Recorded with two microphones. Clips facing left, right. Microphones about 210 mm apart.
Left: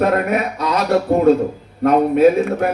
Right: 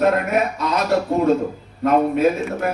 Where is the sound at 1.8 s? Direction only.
55° left (ahead or behind).